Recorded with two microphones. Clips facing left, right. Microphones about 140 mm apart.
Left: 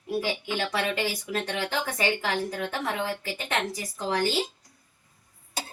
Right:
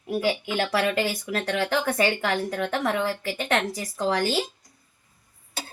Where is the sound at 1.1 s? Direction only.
80° right.